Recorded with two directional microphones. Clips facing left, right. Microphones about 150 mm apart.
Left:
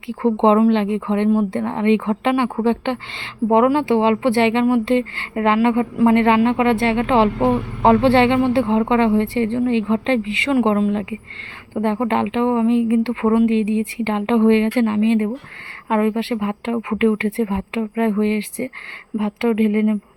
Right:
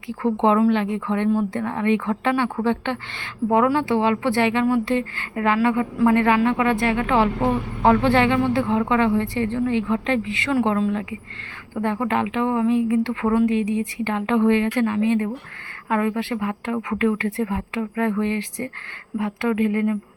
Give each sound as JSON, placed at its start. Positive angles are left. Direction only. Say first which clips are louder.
{"t": 0.1, "sound": "a woman's voice", "louder": "left 4 dB", "side_deg": 20}